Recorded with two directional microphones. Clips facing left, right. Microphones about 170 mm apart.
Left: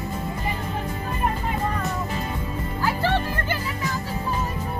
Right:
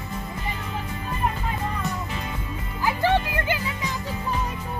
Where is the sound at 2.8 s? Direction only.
15° right (ahead or behind).